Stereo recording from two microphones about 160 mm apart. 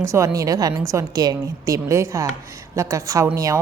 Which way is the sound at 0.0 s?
20° right (ahead or behind).